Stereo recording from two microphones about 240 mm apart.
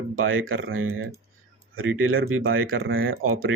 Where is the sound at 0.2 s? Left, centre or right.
Right.